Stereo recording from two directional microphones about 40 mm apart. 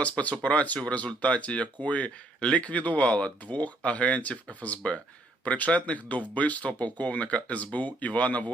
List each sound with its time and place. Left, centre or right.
0.0 s speech: left